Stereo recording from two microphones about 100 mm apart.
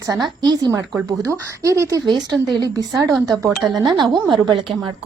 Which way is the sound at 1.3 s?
30° right (ahead or behind).